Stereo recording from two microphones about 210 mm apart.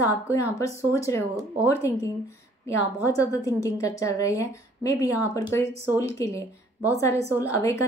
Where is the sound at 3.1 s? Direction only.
15° left (ahead or behind).